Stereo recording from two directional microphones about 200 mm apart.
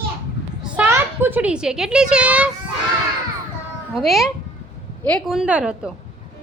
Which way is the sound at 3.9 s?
Centre (ahead or behind).